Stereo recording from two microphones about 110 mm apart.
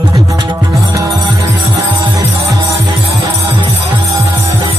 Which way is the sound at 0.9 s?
30° right (ahead or behind).